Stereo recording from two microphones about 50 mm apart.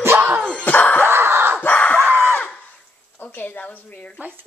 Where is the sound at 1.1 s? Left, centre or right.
Right.